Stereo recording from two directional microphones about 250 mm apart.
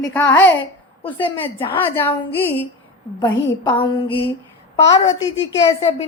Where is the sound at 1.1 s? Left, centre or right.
Centre.